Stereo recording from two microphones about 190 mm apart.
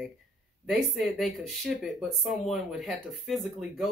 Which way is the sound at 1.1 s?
Centre (ahead or behind).